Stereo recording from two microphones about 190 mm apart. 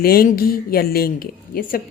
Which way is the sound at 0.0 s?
50° left (ahead or behind).